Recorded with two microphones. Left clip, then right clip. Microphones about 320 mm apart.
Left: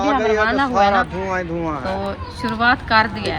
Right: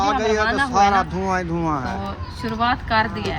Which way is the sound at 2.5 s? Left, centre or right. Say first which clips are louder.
Left 4 dB; centre.